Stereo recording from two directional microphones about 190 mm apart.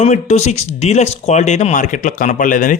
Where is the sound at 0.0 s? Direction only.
35° left (ahead or behind).